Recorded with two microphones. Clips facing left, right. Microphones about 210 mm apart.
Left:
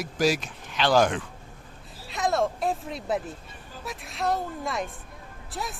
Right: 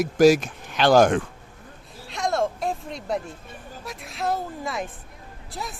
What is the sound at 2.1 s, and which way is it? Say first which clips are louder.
A woman's voice: right 1 dB; centre (ahead or behind).